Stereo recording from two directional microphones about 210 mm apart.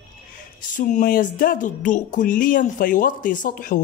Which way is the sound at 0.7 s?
40° left (ahead or behind).